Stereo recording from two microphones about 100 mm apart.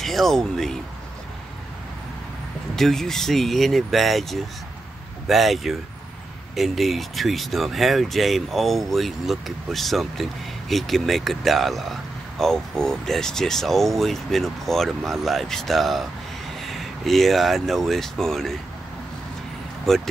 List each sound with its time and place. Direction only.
0.0 s speech: 5° left (ahead or behind)
2.7 s speech: 5° left (ahead or behind)
19.9 s speech: 5° left (ahead or behind)